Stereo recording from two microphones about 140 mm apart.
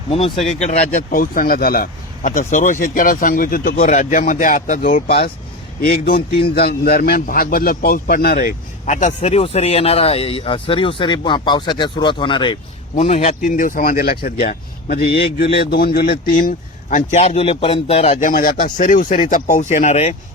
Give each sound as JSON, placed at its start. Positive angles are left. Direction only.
{"t": 0.6, "sound": "a man's voice", "side_deg": 50}
{"t": 1.1, "sound": "a man's voice", "side_deg": 90}
{"t": 13.0, "sound": "a man's voice", "side_deg": 50}
{"t": 13.4, "sound": "a man's voice", "side_deg": 70}
{"t": 18.3, "sound": "speech", "side_deg": 80}